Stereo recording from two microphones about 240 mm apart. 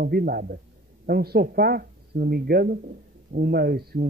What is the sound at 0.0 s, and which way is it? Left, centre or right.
Speech, right.